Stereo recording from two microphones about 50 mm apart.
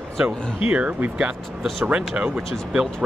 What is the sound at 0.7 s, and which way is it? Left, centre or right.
Speech, right.